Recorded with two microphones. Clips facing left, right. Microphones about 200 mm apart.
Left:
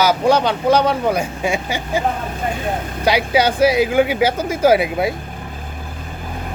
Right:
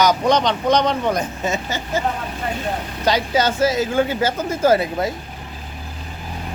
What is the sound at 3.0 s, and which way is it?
Speech, 10° left (ahead or behind).